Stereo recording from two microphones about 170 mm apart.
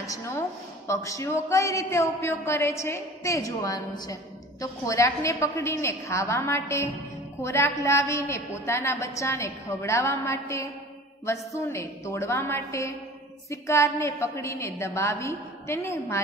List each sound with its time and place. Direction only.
0.0 s a woman's voice: 20° left (ahead or behind)